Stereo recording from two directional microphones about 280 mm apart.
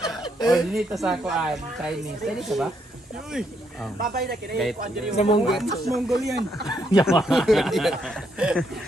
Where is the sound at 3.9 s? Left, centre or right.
Right.